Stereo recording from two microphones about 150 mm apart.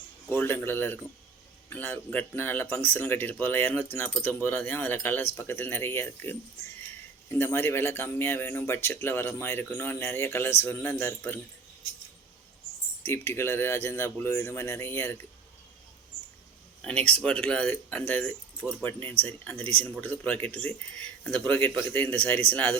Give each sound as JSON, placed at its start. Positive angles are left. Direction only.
{"t": 0.3, "sound": "speech", "side_deg": 15}
{"t": 13.1, "sound": "speech", "side_deg": 15}
{"t": 16.8, "sound": "speech", "side_deg": 10}